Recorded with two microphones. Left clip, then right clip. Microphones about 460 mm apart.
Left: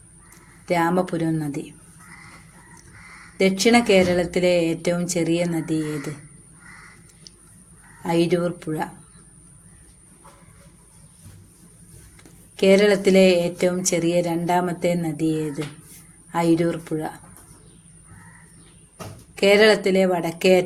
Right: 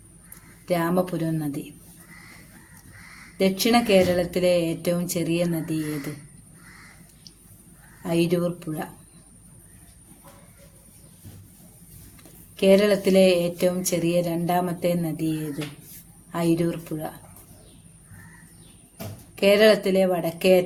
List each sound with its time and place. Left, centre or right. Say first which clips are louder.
0.6 s speech: left 3 dB; right
3.3 s speech: left 3 dB; right
8.0 s speech: left 3 dB; right
12.5 s speech: left 2 dB; right
19.4 s speech: left 2 dB; right